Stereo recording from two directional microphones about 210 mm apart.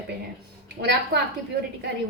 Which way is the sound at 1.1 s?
50° right (ahead or behind).